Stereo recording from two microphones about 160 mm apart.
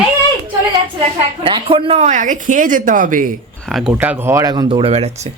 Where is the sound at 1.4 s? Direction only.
35° right (ahead or behind); by 3.3 s 55° right (ahead or behind).